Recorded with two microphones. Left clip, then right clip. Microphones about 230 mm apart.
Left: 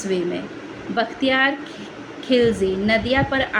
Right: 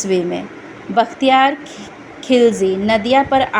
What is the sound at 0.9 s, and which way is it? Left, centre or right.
A woman's voice, right.